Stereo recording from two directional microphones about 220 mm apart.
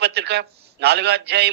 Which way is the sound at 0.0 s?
50° right (ahead or behind).